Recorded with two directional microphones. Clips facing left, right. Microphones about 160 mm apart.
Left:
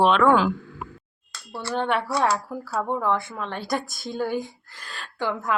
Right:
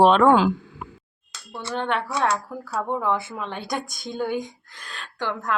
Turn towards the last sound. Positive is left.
turn(degrees=5)  # may be behind; listen again after turning